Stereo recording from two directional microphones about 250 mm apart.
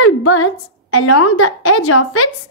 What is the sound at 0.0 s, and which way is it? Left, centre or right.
A woman's voice, left.